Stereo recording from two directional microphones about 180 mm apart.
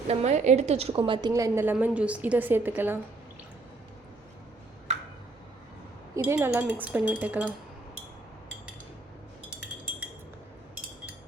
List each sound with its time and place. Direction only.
0.1 s a woman's voice: 35° right (ahead or behind)
1.3 s a woman's voice: 15° right (ahead or behind)
6.1 s a woman's voice: 15° right (ahead or behind)